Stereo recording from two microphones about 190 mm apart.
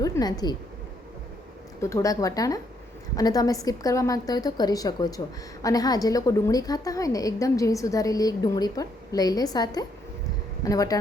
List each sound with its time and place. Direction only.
0.0 s speech: 20° left (ahead or behind)
1.8 s a woman's voice: 15° left (ahead or behind)